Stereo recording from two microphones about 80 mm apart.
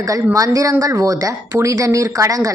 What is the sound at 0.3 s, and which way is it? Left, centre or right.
A woman's voice, right.